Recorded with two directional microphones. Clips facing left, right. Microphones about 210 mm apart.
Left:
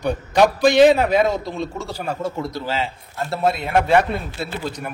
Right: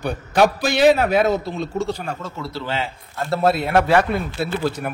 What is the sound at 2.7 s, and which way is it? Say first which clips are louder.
A man's voice: left 1 dB; centre (ahead or behind).